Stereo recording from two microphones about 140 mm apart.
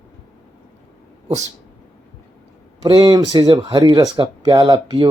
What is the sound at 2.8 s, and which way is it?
Speech, 30° right (ahead or behind).